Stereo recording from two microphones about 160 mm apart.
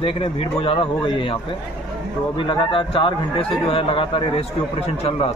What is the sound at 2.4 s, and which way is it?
Speech, 30° left (ahead or behind).